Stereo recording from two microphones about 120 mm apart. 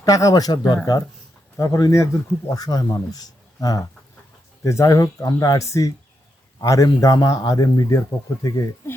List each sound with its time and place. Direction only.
0.0 s a man's voice: 30° left (ahead or behind)